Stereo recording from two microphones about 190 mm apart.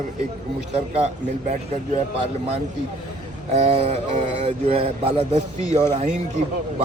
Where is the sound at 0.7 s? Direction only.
35° right (ahead or behind).